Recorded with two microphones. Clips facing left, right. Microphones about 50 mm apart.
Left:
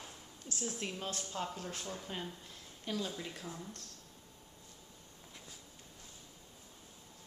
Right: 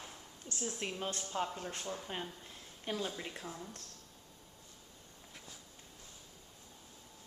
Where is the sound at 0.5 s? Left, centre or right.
Centre.